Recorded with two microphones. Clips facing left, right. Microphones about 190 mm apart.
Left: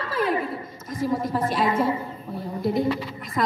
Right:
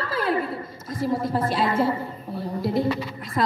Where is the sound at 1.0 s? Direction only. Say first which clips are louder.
Even; 25° right (ahead or behind).